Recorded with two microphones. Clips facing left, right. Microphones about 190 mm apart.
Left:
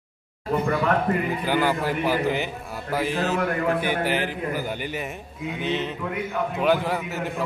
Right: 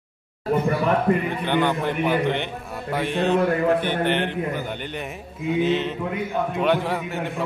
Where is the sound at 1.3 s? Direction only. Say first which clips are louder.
Right 1 dB; 5° left (ahead or behind).